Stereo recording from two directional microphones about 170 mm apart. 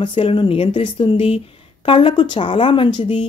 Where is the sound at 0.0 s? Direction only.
30° left (ahead or behind).